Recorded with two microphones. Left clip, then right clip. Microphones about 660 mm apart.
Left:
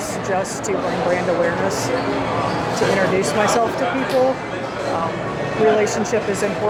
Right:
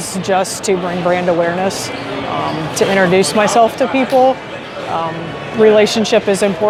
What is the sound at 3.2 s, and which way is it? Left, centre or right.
Speech, right.